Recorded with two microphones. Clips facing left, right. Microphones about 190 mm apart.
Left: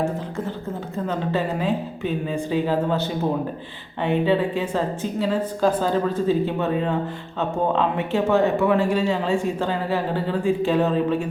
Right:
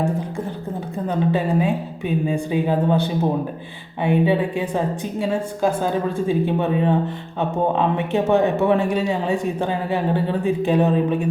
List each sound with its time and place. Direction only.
1.0 s a man's voice: 15° right (ahead or behind)